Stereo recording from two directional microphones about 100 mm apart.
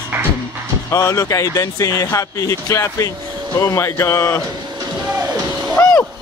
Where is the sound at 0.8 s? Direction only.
30° left (ahead or behind).